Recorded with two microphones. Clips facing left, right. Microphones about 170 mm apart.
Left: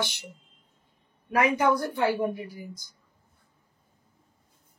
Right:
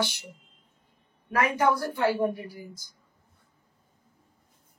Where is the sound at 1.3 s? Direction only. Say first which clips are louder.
Left 1 dB; 20° left (ahead or behind).